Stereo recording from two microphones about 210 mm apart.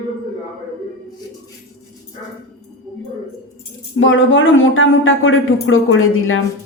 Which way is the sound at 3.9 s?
65° left (ahead or behind).